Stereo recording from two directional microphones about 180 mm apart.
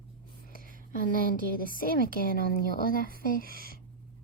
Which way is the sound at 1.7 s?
50° left (ahead or behind).